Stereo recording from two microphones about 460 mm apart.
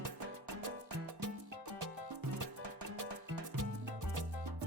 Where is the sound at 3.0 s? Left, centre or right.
Right.